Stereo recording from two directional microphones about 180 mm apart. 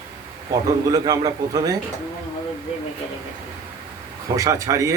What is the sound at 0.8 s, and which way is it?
Speech, 20° right (ahead or behind).